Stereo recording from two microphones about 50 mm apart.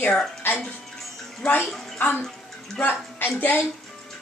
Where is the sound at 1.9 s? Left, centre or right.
Left.